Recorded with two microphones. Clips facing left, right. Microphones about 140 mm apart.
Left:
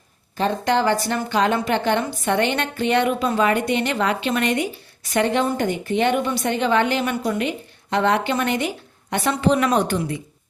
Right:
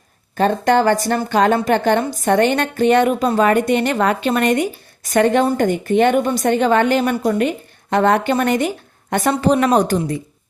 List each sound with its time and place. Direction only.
0.3 s a woman's voice: 50° right (ahead or behind)